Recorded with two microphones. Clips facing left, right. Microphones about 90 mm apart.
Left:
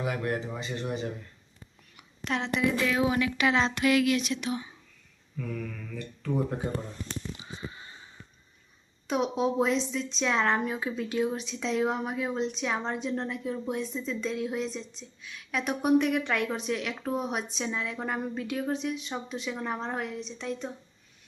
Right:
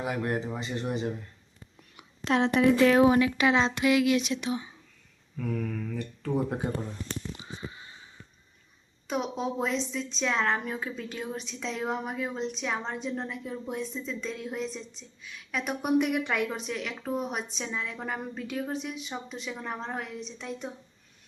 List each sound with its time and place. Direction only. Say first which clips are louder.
0.0 s speech: right 1 dB; 25° right (ahead or behind)
2.4 s speech: right 7 dB; 50° right (ahead or behind); by 4.7 s 25° right (ahead or behind)
9.0 s a woman's voice: left 3 dB; centre (ahead or behind)